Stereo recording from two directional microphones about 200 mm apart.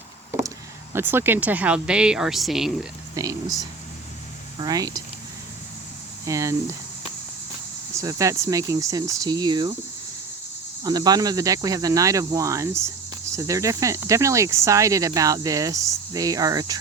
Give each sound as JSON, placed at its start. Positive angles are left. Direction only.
{"t": 0.9, "sound": "speech", "side_deg": -10}
{"t": 4.5, "sound": "speech", "side_deg": -20}
{"t": 6.2, "sound": "speech", "side_deg": -15}
{"t": 8.0, "sound": "speech", "side_deg": -15}
{"t": 10.8, "sound": "speech", "side_deg": -20}